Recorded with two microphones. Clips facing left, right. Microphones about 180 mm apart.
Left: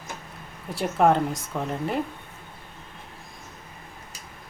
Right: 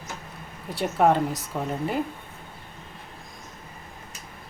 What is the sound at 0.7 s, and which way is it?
Speech, centre (ahead or behind).